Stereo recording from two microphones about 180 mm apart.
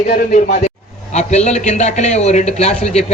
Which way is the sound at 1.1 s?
40° left (ahead or behind).